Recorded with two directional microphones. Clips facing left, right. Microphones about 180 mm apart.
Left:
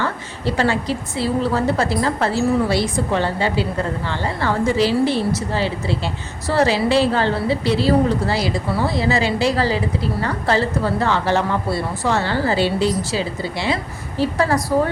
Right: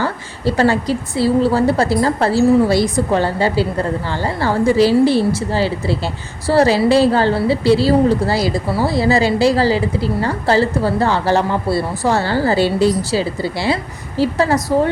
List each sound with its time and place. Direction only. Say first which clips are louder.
0.0 s a woman's voice: right 4 dB; 40° right (ahead or behind)